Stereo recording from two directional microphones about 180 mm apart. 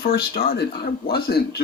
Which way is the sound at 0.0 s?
55° left (ahead or behind).